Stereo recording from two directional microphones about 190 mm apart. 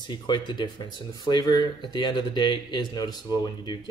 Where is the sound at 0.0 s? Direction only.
25° left (ahead or behind).